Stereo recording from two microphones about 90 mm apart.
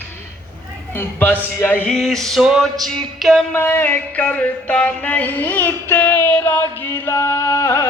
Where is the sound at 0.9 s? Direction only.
20° left (ahead or behind).